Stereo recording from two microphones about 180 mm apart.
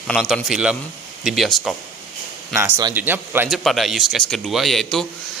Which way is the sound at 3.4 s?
Centre (ahead or behind).